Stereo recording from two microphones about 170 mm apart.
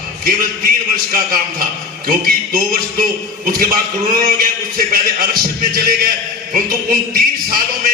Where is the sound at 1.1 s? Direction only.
55° right (ahead or behind).